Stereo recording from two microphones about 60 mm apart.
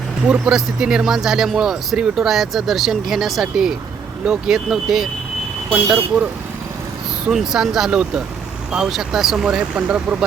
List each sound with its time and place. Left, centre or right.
0.3 s speech: centre
5.7 s speech: right
7.3 s speech: centre